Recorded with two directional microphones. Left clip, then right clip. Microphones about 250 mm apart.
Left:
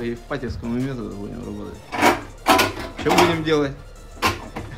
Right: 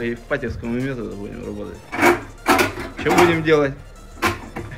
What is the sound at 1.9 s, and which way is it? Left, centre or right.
Speech, left.